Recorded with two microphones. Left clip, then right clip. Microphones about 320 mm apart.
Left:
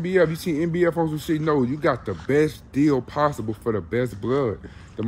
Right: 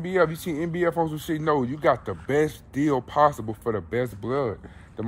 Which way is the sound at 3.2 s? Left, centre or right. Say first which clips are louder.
Right 7 dB; centre.